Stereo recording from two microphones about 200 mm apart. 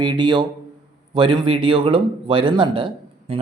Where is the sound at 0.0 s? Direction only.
20° right (ahead or behind).